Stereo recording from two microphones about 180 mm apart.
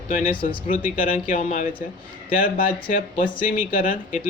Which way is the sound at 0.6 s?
50° left (ahead or behind).